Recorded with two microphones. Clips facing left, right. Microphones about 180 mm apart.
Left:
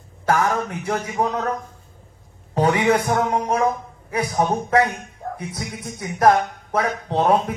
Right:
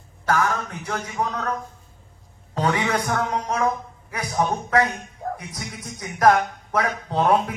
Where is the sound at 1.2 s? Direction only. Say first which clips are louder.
Left 4 dB; 30° left (ahead or behind).